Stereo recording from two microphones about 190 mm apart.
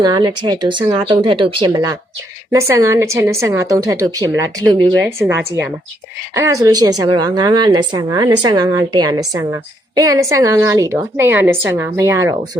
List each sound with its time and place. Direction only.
0.0 s a woman's voice: 20° right (ahead or behind)
6.3 s a woman's voice: 15° right (ahead or behind)